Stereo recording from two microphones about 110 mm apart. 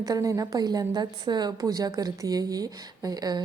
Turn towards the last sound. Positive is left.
turn(degrees=-35)  # may be behind; listen again after turning